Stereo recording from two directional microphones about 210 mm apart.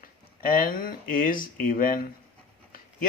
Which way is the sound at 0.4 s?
40° left (ahead or behind).